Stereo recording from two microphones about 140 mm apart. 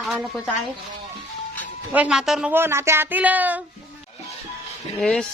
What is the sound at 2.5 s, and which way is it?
Speech, 15° right (ahead or behind).